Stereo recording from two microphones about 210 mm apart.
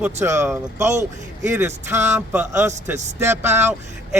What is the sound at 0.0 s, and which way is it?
Speech, 10° right (ahead or behind).